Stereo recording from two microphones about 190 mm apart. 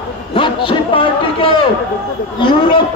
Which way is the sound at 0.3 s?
25° left (ahead or behind).